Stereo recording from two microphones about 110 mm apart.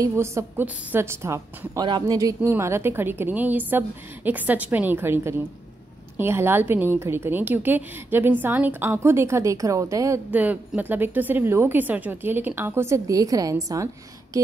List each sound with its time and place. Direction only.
0.0 s a woman's voice: 25° right (ahead or behind)
1.8 s speech: 40° right (ahead or behind)
2.1 s a woman's voice: 30° right (ahead or behind)
10.3 s a woman's voice: 15° right (ahead or behind); by 13.8 s 30° right (ahead or behind)